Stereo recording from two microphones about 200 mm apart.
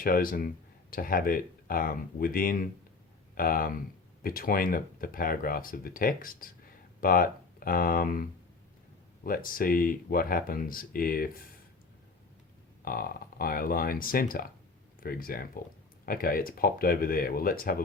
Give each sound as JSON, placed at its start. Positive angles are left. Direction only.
{"t": 0.0, "sound": "speech", "side_deg": 45}
{"t": 12.8, "sound": "speech", "side_deg": 45}